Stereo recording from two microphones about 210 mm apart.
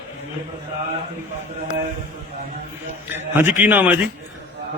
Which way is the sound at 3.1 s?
10° right (ahead or behind).